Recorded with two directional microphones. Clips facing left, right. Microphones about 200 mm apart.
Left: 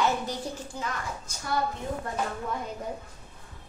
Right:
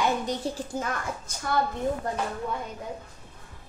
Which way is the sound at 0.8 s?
45° right (ahead or behind).